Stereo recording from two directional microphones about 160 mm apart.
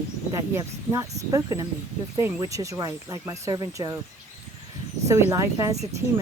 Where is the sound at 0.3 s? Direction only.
15° right (ahead or behind).